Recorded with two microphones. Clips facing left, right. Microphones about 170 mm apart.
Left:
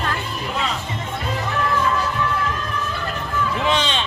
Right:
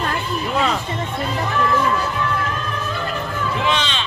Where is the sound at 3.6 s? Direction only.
40° left (ahead or behind).